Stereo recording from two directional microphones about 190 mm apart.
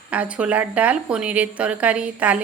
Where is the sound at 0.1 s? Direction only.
5° right (ahead or behind).